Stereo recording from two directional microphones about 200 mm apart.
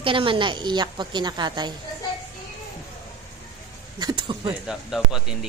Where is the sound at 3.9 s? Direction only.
20° right (ahead or behind).